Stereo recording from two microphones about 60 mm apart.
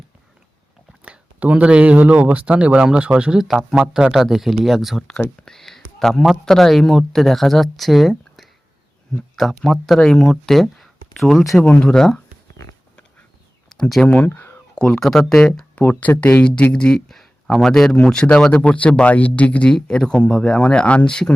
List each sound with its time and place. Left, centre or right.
1.0 s speech: right; by 5.0 s centre
5.5 s a sound: centre
6.0 s a man's voice: centre
11.6 s speech: left
11.9 s speech: centre
13.7 s a sound: centre
14.3 s a sound: left
14.8 s speech: centre
15.0 s speech: centre
15.8 s speech: left
19.7 s speech: centre